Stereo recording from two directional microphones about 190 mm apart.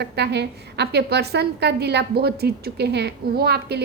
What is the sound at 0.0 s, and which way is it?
A woman's voice, 60° right (ahead or behind).